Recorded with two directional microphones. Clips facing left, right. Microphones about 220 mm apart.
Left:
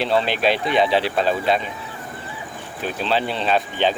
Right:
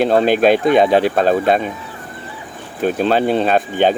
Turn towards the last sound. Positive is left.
turn(degrees=-50)  # may be behind; listen again after turning